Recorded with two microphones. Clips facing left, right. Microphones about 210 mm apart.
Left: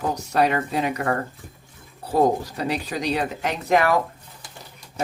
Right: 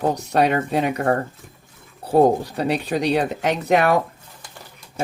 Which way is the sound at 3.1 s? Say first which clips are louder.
Right 4 dB; 35° right (ahead or behind).